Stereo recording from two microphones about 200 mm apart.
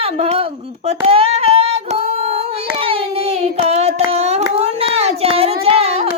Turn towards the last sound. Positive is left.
turn(degrees=-30)  # may be behind; listen again after turning